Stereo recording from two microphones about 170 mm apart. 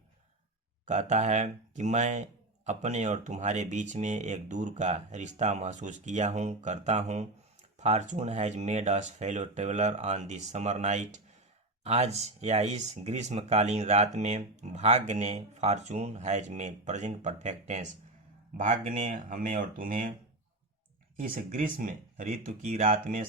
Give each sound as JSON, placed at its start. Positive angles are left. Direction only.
{"t": 0.9, "sound": "speech", "side_deg": -45}
{"t": 21.2, "sound": "speech", "side_deg": -55}